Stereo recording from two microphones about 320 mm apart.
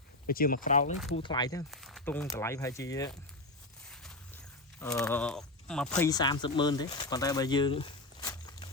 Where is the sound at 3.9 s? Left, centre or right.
Centre.